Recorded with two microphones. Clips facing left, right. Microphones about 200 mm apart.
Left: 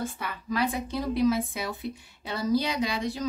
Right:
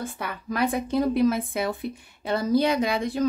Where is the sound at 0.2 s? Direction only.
55° right (ahead or behind).